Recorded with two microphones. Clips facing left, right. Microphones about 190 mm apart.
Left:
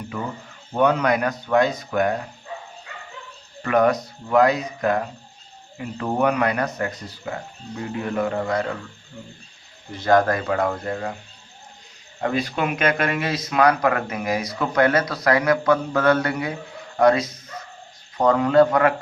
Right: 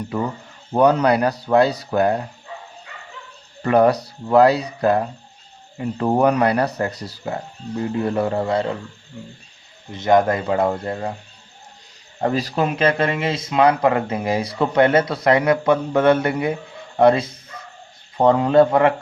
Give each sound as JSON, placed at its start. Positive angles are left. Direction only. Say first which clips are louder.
{"t": 0.7, "sound": "speech", "louder": "right 4 dB", "side_deg": -40}
{"t": 3.6, "sound": "speech", "louder": "right 3 dB", "side_deg": -30}
{"t": 9.9, "sound": "speech", "louder": "right 2 dB", "side_deg": -20}
{"t": 12.2, "sound": "speech", "louder": "right 3 dB", "side_deg": -35}